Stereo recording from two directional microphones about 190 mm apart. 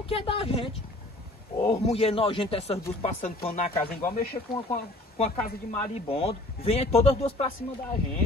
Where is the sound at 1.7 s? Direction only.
30° left (ahead or behind).